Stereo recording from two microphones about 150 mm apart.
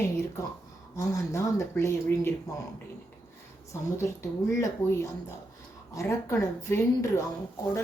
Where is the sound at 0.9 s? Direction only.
20° left (ahead or behind).